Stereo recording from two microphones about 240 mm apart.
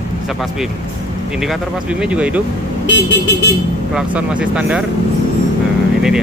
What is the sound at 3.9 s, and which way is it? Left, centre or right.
Speech, centre.